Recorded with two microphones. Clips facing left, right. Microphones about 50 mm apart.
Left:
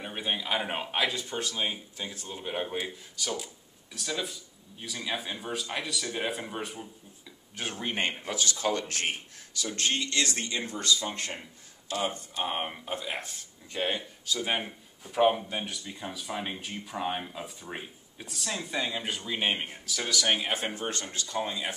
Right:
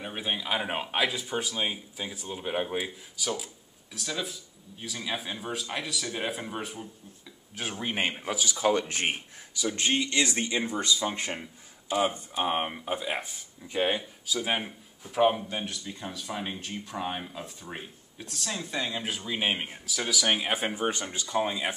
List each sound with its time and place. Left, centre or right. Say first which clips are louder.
0.0 s speech: even; centre